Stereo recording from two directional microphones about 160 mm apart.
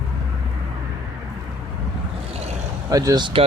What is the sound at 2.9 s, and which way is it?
Speech, 20° right (ahead or behind).